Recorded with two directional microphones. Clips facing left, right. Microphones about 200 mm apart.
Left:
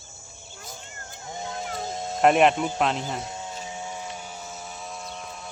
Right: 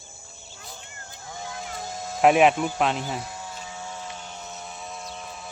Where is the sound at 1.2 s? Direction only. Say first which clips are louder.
Left 3 dB; 25° left (ahead or behind).